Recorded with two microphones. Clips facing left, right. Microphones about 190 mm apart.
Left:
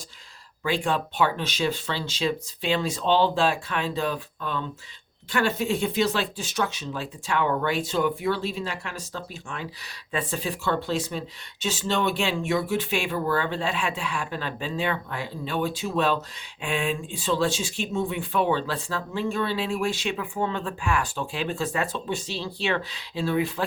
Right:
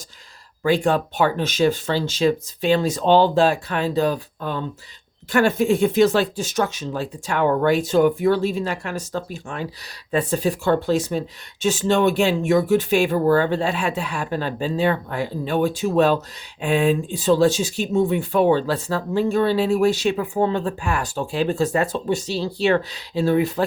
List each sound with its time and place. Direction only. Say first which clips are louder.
0.6 s speech: right 7 dB; 40° right (ahead or behind)